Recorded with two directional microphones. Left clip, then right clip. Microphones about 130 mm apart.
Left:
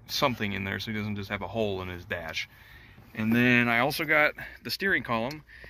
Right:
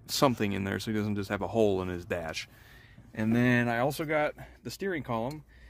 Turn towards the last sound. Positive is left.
turn(degrees=-30)  # may be behind; listen again after turning